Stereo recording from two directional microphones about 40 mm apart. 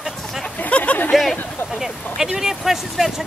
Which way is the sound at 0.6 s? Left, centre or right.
Left.